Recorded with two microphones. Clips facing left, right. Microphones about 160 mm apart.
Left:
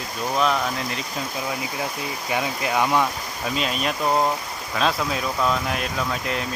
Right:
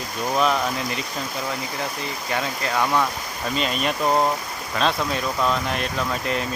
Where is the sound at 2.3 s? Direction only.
15° left (ahead or behind).